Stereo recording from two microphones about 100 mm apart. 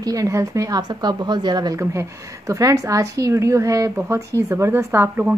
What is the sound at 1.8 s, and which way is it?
A woman's voice, 30° right (ahead or behind).